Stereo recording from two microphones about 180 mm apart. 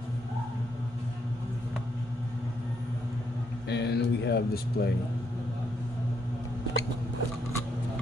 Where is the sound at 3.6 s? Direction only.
70° left (ahead or behind).